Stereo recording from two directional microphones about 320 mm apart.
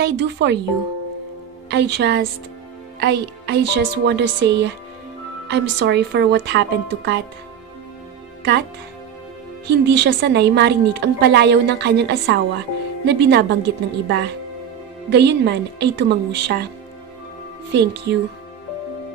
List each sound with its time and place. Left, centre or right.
0.0 s a woman's voice: right
1.7 s a woman's voice: right
9.7 s a woman's voice: right
17.7 s a woman's voice: right